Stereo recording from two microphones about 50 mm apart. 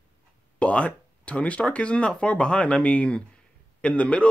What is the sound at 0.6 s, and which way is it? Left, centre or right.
Speech, left.